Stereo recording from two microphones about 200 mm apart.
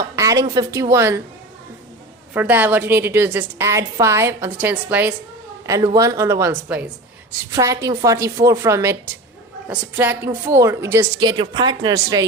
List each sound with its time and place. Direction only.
0.2 s a sound: 15° right (ahead or behind)
0.5 s a woman's voice: 15° right (ahead or behind)
2.3 s a woman's voice: 10° right (ahead or behind)